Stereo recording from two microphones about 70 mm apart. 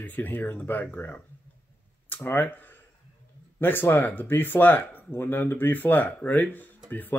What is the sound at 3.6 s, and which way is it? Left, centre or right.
Speech, left.